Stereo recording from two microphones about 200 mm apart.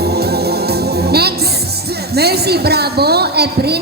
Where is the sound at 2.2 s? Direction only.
55° right (ahead or behind).